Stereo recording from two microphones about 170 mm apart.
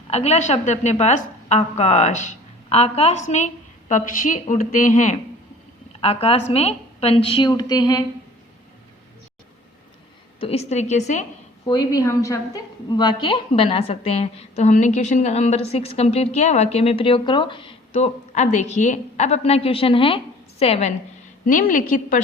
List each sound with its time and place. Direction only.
0.1 s a woman's voice: 40° left (ahead or behind)
6.0 s a woman's voice: 35° left (ahead or behind)
10.4 s a woman's voice: 40° left (ahead or behind)
11.7 s a woman's voice: 20° left (ahead or behind); by 20.9 s 35° left (ahead or behind)
21.4 s a woman's voice: 55° left (ahead or behind)